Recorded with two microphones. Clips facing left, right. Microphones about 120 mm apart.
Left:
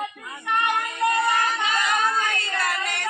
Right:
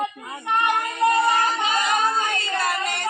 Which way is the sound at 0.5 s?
30° right (ahead or behind).